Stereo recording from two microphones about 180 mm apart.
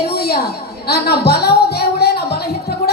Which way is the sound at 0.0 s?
60° left (ahead or behind).